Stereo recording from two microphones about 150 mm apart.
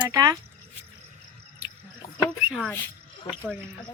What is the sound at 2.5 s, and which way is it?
Speech, 5° left (ahead or behind).